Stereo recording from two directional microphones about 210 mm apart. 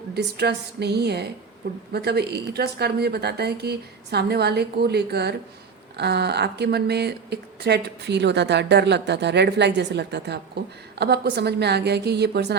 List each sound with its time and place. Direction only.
0.1 s speech: 50° right (ahead or behind)